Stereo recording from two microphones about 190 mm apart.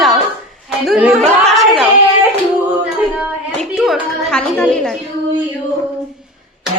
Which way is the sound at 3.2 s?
Centre (ahead or behind).